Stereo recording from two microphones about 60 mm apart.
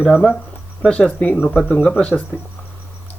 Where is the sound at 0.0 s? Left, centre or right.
Centre.